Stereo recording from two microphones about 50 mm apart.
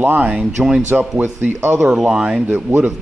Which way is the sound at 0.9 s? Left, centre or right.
Right.